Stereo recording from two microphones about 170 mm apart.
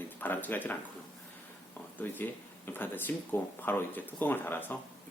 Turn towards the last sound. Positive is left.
turn(degrees=10)  # may be behind; listen again after turning